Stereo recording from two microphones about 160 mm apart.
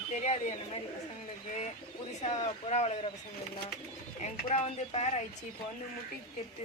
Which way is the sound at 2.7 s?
45° left (ahead or behind).